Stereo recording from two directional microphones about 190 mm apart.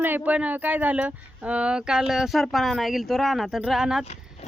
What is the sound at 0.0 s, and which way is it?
Speech, 10° right (ahead or behind).